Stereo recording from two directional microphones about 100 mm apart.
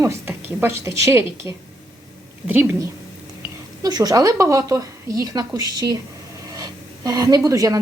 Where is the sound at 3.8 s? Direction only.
35° right (ahead or behind).